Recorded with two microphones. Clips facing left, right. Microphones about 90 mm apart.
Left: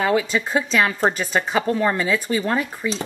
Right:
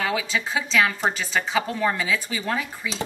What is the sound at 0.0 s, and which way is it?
Speech, 45° left (ahead or behind).